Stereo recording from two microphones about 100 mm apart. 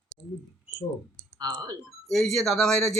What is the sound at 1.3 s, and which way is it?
Speech, 40° right (ahead or behind).